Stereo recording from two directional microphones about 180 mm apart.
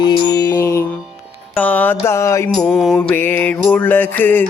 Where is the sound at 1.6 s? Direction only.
10° left (ahead or behind).